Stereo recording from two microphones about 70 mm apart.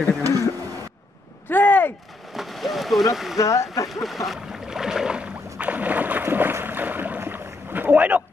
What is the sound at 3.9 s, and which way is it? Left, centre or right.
Speech, centre.